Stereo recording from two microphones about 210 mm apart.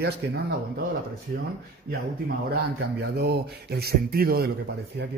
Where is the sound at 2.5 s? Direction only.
50° right (ahead or behind).